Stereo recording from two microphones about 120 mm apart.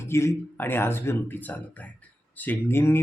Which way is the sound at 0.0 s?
20° left (ahead or behind).